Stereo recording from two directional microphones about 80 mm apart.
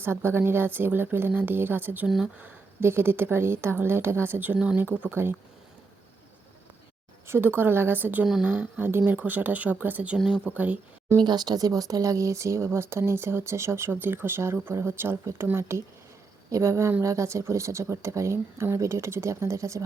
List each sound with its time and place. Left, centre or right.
0.0 s a woman's voice: right
2.0 s speech: centre
2.4 s a woman's voice: right
7.3 s a woman's voice: right
10.2 s speech: centre
10.4 s a woman's voice: centre
11.2 s speech: right